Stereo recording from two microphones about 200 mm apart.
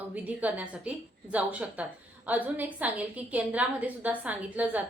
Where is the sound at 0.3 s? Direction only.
5° right (ahead or behind).